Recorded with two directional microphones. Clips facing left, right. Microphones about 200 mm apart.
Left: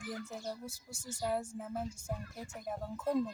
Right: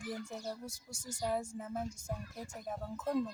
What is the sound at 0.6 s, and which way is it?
Speech, 5° left (ahead or behind).